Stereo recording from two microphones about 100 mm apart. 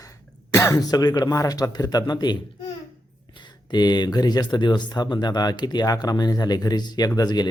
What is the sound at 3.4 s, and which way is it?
Speech, 45° left (ahead or behind).